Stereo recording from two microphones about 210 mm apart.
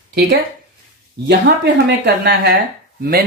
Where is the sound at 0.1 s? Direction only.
50° right (ahead or behind).